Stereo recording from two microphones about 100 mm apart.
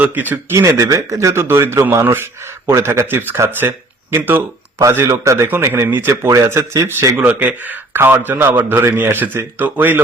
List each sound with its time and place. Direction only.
0.0 s speech: 15° right (ahead or behind)
0.5 s a man's voice: 30° right (ahead or behind)
7.3 s a man's voice: 15° right (ahead or behind)